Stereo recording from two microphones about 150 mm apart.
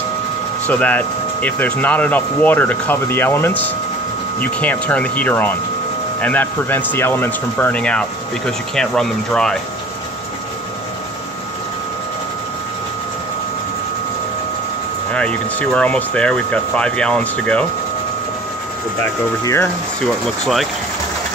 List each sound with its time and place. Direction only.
0.7 s speech: 10° left (ahead or behind)
15.1 s speech: 10° left (ahead or behind)
19.4 s speech: 15° left (ahead or behind)
20.1 s speech: centre (ahead or behind)